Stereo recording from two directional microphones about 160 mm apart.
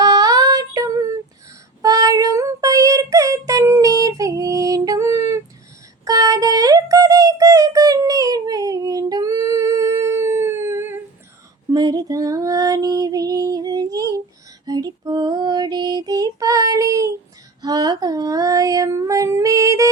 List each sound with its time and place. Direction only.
0.0 s child singing: 25° right (ahead or behind)
6.1 s a sound: 20° right (ahead or behind)
11.7 s female singing: 25° right (ahead or behind)